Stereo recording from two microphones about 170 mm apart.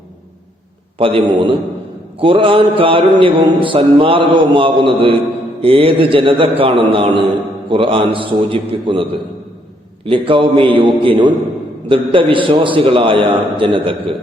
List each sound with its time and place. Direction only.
0.9 s mantra: 30° right (ahead or behind)
10.1 s mantra: 30° right (ahead or behind)